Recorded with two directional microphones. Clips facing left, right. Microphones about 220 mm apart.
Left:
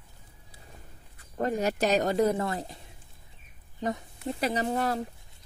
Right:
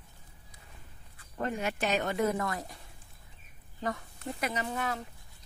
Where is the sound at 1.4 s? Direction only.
40° left (ahead or behind).